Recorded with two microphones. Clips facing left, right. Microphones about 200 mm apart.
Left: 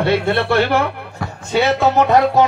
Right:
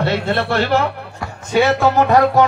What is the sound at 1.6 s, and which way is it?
Speech, 20° left (ahead or behind).